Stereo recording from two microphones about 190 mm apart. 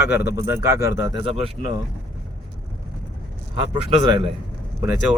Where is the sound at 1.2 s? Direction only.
30° right (ahead or behind).